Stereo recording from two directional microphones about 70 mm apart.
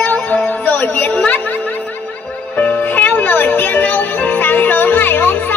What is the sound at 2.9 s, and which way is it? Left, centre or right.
Music, left.